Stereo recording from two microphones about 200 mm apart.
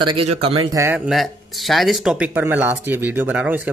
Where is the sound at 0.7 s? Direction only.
10° right (ahead or behind).